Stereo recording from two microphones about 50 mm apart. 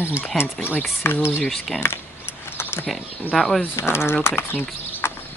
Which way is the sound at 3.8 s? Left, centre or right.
Left.